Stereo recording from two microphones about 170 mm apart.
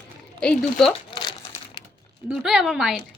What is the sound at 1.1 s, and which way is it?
Crumpling, 25° left (ahead or behind).